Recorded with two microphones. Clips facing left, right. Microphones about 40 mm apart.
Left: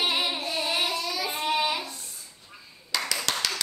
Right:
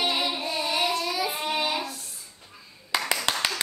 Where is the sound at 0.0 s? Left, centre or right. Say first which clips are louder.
Even; centre.